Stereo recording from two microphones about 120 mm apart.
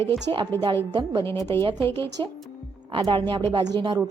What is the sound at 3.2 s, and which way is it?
Speech, 45° right (ahead or behind).